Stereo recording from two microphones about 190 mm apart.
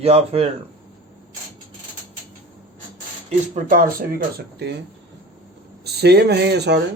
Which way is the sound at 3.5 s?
45° right (ahead or behind).